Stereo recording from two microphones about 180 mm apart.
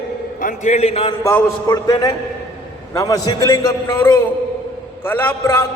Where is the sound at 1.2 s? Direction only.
20° left (ahead or behind).